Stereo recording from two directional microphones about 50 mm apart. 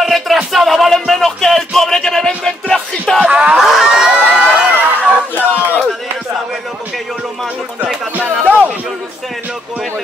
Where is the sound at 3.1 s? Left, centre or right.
Right.